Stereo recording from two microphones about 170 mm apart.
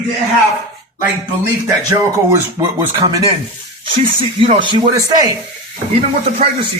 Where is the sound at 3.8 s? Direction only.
30° right (ahead or behind).